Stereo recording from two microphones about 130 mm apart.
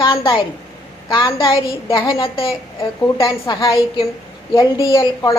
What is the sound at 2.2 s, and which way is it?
A woman's voice, 45° left (ahead or behind).